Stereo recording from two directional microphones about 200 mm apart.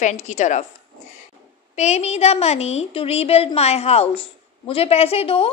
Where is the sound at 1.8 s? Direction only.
35° left (ahead or behind).